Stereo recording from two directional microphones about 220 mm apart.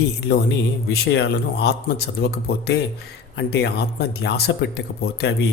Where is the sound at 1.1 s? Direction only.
50° left (ahead or behind).